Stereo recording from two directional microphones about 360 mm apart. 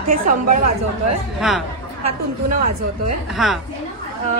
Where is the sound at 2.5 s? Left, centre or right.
Right.